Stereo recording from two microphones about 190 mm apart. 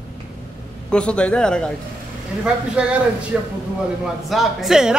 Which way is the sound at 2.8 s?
5° right (ahead or behind).